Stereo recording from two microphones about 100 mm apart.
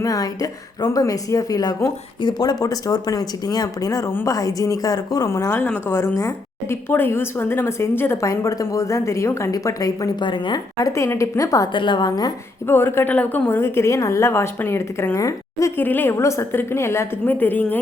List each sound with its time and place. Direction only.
0.0 s a woman's voice: 35° left (ahead or behind)
10.2 s a woman's voice: 50° left (ahead or behind)
10.8 s a woman's voice: 35° left (ahead or behind)
11.7 s a woman's voice: 55° left (ahead or behind)
12.6 s a woman's voice: 20° left (ahead or behind)
15.8 s a woman's voice: 20° left (ahead or behind)